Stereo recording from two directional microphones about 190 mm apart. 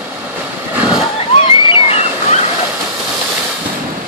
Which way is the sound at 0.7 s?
5° right (ahead or behind).